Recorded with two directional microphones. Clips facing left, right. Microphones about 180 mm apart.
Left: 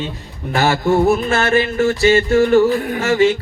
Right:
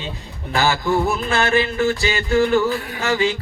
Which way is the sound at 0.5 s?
45° left (ahead or behind).